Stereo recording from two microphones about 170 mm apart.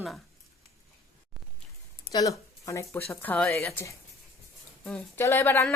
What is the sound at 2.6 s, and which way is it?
Speech, 15° left (ahead or behind).